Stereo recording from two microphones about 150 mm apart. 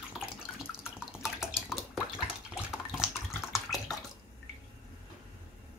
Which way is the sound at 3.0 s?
Centre (ahead or behind).